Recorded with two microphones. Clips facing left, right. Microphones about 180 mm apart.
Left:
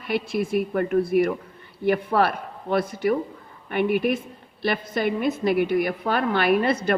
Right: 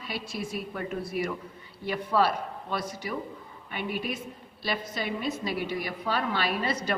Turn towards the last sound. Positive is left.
turn(degrees=55)  # may be behind; listen again after turning